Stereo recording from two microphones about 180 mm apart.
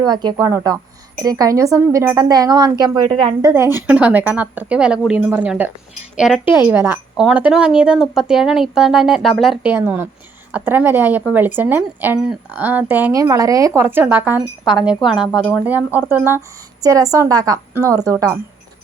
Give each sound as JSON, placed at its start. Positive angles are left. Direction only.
{"t": 0.0, "sound": "speech", "side_deg": -25}
{"t": 3.4, "sound": "speech", "side_deg": -15}
{"t": 9.7, "sound": "speech", "side_deg": -10}